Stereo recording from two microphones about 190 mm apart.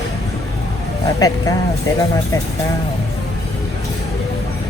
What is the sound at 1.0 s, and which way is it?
Speech, 20° left (ahead or behind).